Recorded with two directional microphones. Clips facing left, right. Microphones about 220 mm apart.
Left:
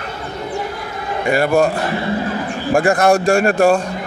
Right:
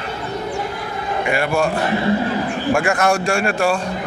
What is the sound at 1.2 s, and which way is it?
Speech, 40° left (ahead or behind).